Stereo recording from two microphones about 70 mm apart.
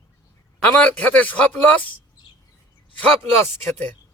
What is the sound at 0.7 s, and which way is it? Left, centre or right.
Speech, left.